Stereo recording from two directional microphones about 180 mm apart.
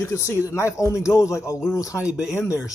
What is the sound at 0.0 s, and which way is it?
Speech, 15° left (ahead or behind).